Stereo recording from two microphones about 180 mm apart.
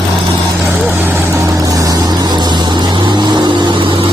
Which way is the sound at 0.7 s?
10° right (ahead or behind).